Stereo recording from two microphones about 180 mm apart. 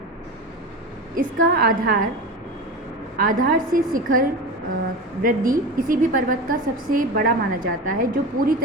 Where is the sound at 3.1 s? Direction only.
50° right (ahead or behind).